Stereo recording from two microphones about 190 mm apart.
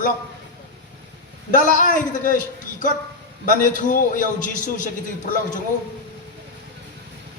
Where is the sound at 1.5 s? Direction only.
45° left (ahead or behind).